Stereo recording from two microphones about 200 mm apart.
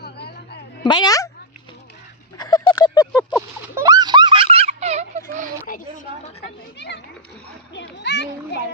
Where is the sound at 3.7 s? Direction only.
15° right (ahead or behind); by 5.2 s 35° right (ahead or behind).